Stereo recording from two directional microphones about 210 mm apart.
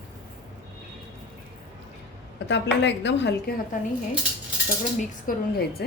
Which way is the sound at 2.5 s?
55° left (ahead or behind).